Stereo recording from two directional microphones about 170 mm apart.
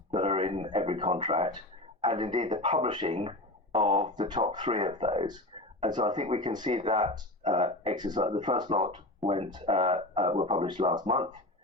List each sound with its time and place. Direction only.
0.1 s speech: 35° right (ahead or behind)